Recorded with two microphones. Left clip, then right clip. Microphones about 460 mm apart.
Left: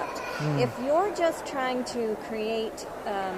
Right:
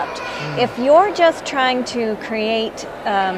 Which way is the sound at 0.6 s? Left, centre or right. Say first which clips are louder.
Right 13 dB; centre.